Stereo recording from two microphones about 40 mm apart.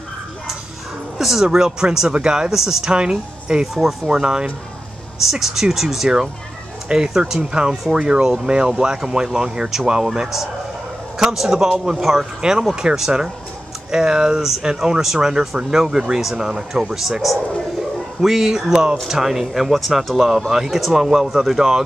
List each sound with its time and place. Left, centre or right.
1.1 s speech: centre
2.9 s speech: right
11.3 s speech: centre
12.4 s speech: centre